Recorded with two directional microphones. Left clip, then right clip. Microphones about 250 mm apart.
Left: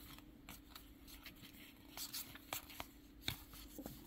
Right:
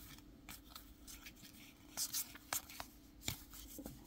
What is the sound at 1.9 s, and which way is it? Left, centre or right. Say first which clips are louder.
Writing: right 5 dB; centre.